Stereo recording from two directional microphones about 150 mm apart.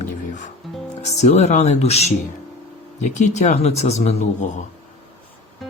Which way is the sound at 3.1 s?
50° left (ahead or behind).